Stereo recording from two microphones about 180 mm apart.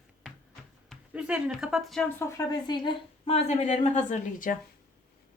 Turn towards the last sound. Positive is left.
turn(degrees=45)  # may be behind; listen again after turning